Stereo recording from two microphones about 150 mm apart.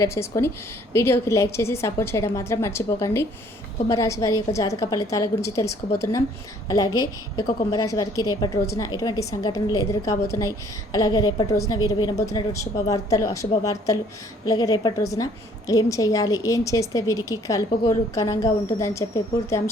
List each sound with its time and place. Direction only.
0.0 s a woman's voice: 20° left (ahead or behind)